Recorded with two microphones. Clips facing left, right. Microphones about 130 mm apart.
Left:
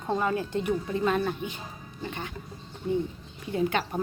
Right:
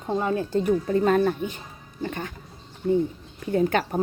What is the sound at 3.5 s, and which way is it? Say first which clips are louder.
Speech: right 5 dB; 45° right (ahead or behind).